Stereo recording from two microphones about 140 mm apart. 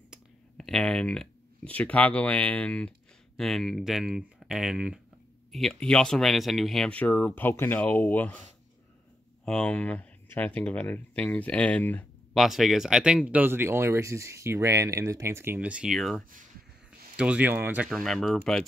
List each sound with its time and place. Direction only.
0.1 s speech: 5° left (ahead or behind)
9.4 s speech: 5° left (ahead or behind)
12.4 s speech: centre (ahead or behind)
17.2 s speech: 10° right (ahead or behind)
17.8 s speech: centre (ahead or behind)